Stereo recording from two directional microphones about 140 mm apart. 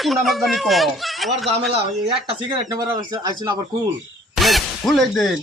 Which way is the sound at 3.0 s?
30° right (ahead or behind).